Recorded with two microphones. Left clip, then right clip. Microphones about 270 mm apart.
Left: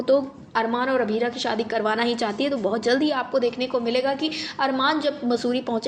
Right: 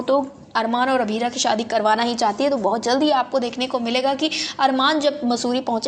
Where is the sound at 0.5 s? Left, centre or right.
Right.